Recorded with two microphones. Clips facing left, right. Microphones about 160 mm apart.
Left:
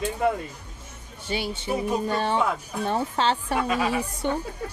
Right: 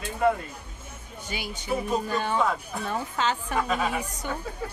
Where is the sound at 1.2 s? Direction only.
30° left (ahead or behind).